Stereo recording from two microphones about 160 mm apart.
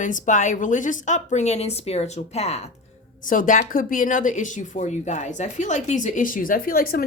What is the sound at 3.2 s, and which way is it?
Speech, 55° left (ahead or behind).